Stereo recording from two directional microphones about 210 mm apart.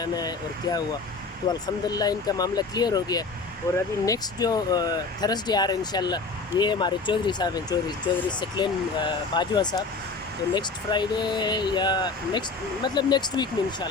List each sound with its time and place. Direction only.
0.0 s speech: 20° left (ahead or behind)